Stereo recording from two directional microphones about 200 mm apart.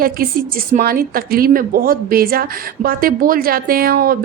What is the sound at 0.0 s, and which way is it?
Speech, 45° right (ahead or behind).